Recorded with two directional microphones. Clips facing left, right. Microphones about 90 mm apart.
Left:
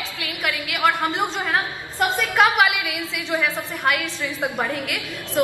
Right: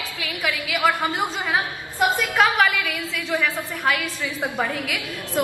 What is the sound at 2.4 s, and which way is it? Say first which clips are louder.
A woman's voice: left 2 dB; 10° left (ahead or behind).